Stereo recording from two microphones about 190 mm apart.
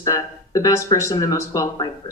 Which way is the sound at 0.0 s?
15° left (ahead or behind).